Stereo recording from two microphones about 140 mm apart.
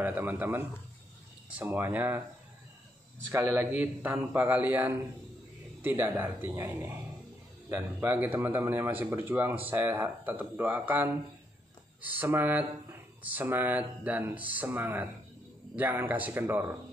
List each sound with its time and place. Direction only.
0.0 s speech: 15° right (ahead or behind)
3.8 s speech: 15° right (ahead or behind)